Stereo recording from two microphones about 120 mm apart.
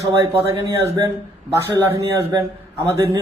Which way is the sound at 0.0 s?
25° right (ahead or behind).